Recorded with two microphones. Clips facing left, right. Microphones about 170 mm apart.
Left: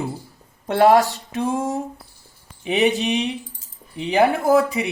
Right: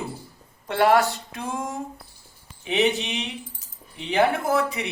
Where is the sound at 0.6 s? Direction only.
40° left (ahead or behind).